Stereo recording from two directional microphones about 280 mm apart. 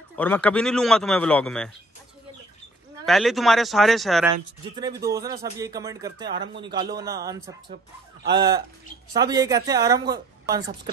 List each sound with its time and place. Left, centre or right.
0.1 s speech: centre
3.1 s speech: centre
4.3 s speech: centre
6.2 s speech: right
6.9 s speech: centre
7.7 s speech: right
9.1 s speech: centre